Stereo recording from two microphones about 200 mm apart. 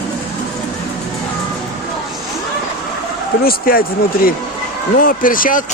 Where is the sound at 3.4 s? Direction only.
45° left (ahead or behind).